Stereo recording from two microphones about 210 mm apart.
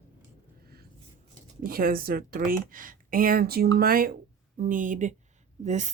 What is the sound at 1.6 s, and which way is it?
Speech, 45° right (ahead or behind).